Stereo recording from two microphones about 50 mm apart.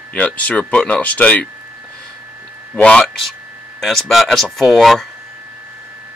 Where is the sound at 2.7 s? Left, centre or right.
Left.